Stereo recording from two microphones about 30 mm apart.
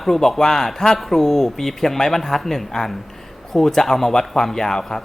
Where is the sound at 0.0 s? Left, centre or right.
Centre.